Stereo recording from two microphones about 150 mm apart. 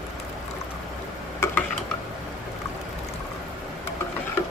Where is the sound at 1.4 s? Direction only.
20° left (ahead or behind).